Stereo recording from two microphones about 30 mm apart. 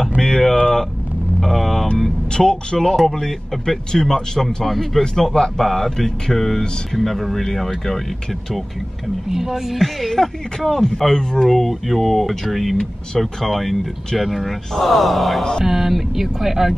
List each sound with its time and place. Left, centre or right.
0.2 s a sound: centre
1.4 s vehicle: centre
2.3 s speech: left
9.3 s speech: centre
9.8 s speech: centre
11.4 s speech: centre
15.6 s speech: centre